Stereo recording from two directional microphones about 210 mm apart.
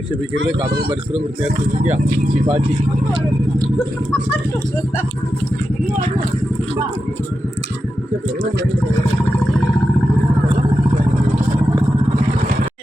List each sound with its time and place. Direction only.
0.3 s speech: 50° right (ahead or behind)
1.8 s speech: 35° right (ahead or behind)